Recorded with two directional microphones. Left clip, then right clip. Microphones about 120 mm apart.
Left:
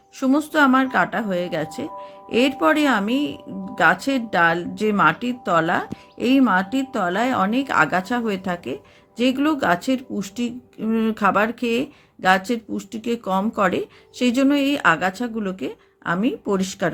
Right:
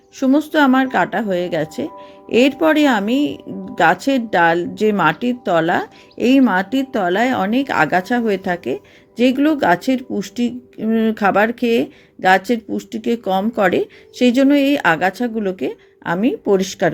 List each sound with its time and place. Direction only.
0.2 s speech: 15° right (ahead or behind)